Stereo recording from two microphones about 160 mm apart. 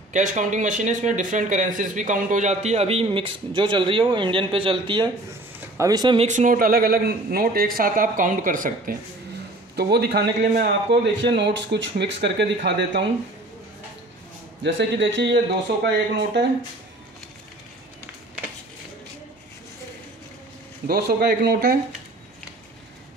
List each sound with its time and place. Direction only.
0.1 s speech: 50° right (ahead or behind); by 6.1 s 25° right (ahead or behind)
6.1 s speech: 50° right (ahead or behind)
9.8 s speech: 90° right
14.6 s speech: 90° right
20.8 s speech: 75° right (ahead or behind)